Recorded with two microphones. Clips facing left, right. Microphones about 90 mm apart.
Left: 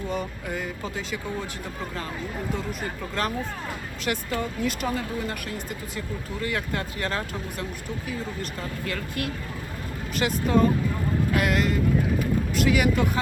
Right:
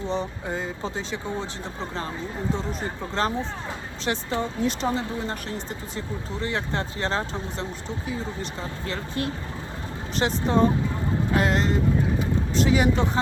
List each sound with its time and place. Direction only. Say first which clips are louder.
0.0 s speech: right 2 dB; 25° right (ahead or behind)
12.2 s vehicle: even; 30° right (ahead or behind)